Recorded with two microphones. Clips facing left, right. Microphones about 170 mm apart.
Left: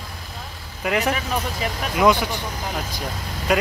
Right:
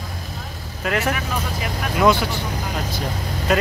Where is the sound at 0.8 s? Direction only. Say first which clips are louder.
Even; 15° left (ahead or behind).